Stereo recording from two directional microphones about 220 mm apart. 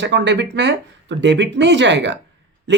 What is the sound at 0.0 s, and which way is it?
Speech, 50° right (ahead or behind).